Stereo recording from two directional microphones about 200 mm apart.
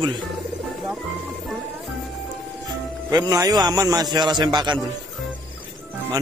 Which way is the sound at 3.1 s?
20° right (ahead or behind).